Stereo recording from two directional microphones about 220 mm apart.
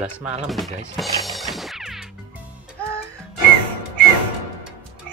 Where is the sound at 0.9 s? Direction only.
Centre (ahead or behind).